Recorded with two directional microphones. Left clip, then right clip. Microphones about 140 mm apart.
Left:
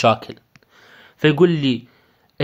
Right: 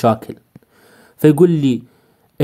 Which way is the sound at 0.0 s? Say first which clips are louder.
Even; 50° right (ahead or behind).